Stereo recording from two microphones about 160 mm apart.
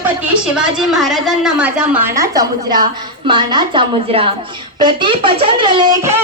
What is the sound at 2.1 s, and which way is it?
A woman's voice, 20° right (ahead or behind).